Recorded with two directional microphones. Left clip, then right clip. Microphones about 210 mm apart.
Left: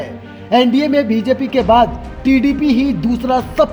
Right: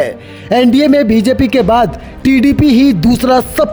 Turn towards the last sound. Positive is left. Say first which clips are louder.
# right 4 dB
turn(degrees=-45)  # may be behind; listen again after turning